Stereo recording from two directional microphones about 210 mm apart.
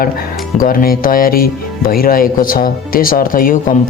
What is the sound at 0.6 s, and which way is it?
Speech, 45° left (ahead or behind).